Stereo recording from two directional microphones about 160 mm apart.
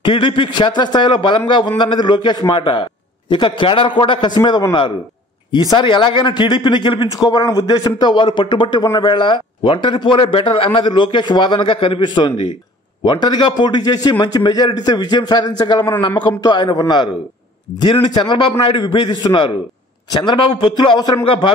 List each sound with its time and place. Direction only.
0.0 s speech: 30° left (ahead or behind)